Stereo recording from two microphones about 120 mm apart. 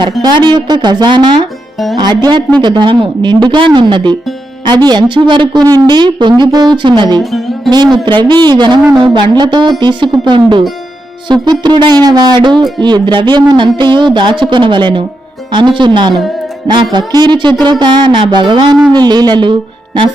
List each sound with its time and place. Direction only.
0.2 s speech: 35° right (ahead or behind)
7.2 s speech: centre (ahead or behind)
7.9 s speech: 40° right (ahead or behind)